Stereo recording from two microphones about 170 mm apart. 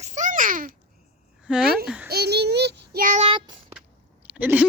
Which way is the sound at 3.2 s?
30° right (ahead or behind).